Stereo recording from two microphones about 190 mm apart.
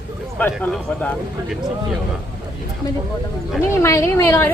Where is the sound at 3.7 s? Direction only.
15° left (ahead or behind).